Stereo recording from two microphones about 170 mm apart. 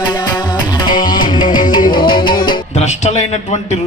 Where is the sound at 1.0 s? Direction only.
55° left (ahead or behind).